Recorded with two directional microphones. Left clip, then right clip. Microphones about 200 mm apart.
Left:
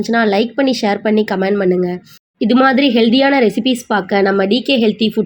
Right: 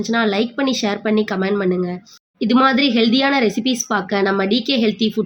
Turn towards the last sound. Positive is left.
turn(degrees=10)  # may be behind; listen again after turning